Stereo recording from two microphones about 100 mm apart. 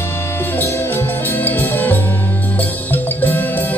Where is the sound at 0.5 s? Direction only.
20° left (ahead or behind).